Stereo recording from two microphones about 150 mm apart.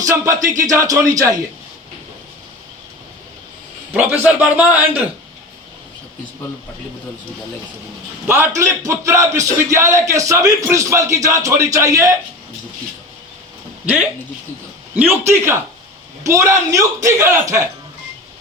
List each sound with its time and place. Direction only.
0.0 s speech: 20° right (ahead or behind)
3.9 s a man's voice: 10° right (ahead or behind)
8.3 s speech: 15° right (ahead or behind)
13.8 s a man's voice: 10° right (ahead or behind)
15.3 s a man's voice: 15° right (ahead or behind)